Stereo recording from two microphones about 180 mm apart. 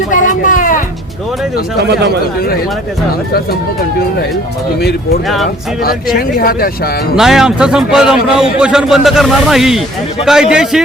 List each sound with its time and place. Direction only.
0.1 s a sound: 45° left (ahead or behind)
1.8 s speech: 65° right (ahead or behind)
4.8 s speech: 60° left (ahead or behind)
7.2 s a man's voice: centre (ahead or behind)